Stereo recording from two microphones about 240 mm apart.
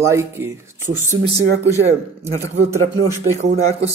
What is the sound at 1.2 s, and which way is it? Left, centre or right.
Speech, right.